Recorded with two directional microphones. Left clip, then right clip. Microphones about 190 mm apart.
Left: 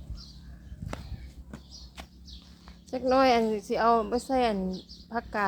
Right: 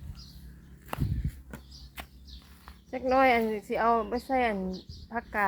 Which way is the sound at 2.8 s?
5° left (ahead or behind).